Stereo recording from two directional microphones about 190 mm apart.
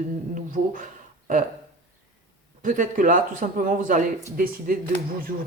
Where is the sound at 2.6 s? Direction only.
45° right (ahead or behind).